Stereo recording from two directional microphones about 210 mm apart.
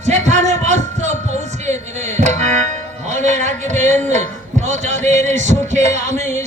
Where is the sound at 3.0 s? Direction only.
35° right (ahead or behind).